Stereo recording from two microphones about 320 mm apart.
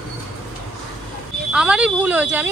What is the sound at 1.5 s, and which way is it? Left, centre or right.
Speech, centre.